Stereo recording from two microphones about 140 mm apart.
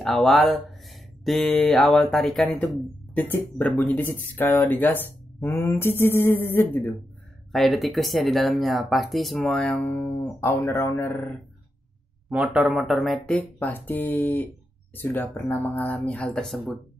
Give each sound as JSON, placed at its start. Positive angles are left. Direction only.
{"t": 0.0, "sound": "speech", "side_deg": 0}
{"t": 7.5, "sound": "speech", "side_deg": 0}
{"t": 12.3, "sound": "speech", "side_deg": -10}